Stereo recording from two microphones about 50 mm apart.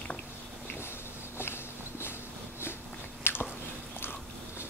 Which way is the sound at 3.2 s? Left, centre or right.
Left.